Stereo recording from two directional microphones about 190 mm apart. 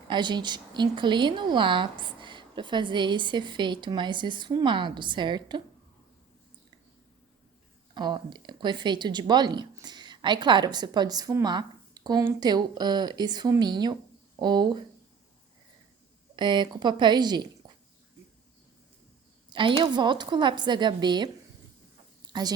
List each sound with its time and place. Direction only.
0.1 s speech: 25° right (ahead or behind)
7.9 s speech: 25° right (ahead or behind)
16.3 s speech: 25° right (ahead or behind)
19.5 s speech: 25° right (ahead or behind)
22.3 s a sound: 20° right (ahead or behind)